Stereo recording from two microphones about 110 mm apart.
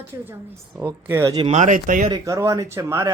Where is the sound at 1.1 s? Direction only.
25° right (ahead or behind).